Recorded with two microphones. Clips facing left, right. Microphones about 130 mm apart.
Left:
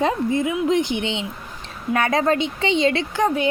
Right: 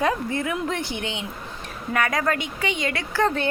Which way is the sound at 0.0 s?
20° left (ahead or behind).